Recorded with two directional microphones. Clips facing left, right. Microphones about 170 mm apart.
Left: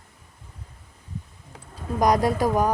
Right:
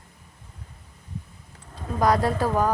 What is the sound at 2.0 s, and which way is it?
Speech, 15° left (ahead or behind).